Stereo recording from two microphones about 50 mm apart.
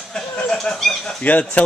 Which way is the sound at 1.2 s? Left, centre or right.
Left.